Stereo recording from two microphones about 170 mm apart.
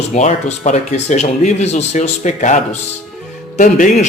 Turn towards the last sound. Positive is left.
turn(degrees=50)  # may be behind; listen again after turning